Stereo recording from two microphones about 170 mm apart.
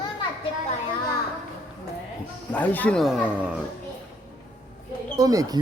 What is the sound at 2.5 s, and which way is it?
A man's voice, 10° left (ahead or behind).